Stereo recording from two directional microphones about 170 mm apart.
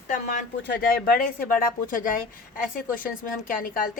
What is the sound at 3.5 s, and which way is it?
Speech, 55° left (ahead or behind).